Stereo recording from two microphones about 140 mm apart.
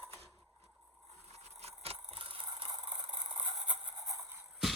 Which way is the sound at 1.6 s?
45° right (ahead or behind).